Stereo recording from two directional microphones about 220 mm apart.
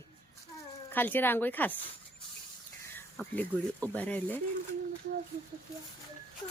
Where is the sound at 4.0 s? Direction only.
5° left (ahead or behind).